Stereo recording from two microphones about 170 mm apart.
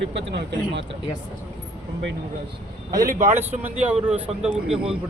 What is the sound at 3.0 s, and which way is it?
Speech, 50° right (ahead or behind).